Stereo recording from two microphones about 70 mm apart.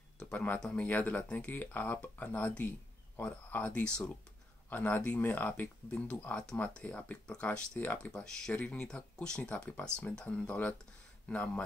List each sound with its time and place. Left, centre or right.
0.2 s speech: centre
4.6 s speech: left